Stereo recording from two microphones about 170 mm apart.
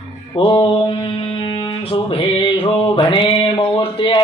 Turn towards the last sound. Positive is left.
turn(degrees=30)  # may be behind; listen again after turning